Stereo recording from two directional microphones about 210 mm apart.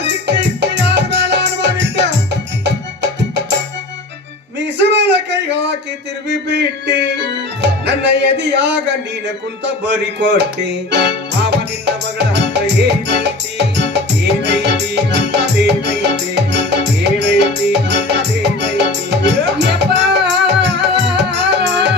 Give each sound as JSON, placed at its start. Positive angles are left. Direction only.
{"t": 0.1, "sound": "music", "side_deg": -55}
{"t": 4.8, "sound": "a sound", "side_deg": -55}
{"t": 6.3, "sound": "music", "side_deg": -55}
{"t": 9.8, "sound": "music", "side_deg": -55}